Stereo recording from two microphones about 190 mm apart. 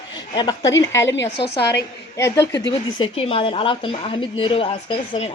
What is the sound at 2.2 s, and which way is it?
A woman's voice, 15° left (ahead or behind).